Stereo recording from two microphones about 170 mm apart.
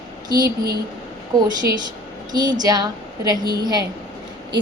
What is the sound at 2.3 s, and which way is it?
A woman's voice, 25° right (ahead or behind).